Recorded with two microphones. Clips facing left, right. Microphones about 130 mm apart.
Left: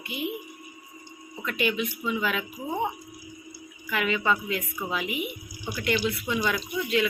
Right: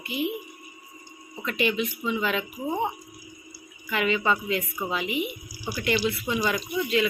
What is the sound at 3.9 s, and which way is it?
Speech, centre (ahead or behind).